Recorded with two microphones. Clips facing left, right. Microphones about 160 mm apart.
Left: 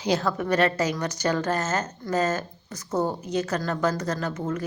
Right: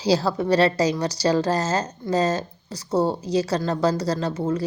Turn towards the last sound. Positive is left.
turn(degrees=-30)  # may be behind; listen again after turning